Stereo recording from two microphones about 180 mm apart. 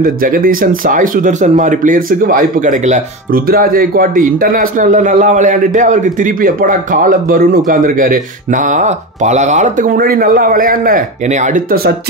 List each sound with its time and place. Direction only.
0.0 s a man's voice: 50° right (ahead or behind)